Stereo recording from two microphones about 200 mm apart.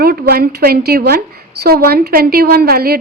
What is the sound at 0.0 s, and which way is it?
A woman's voice, 50° right (ahead or behind).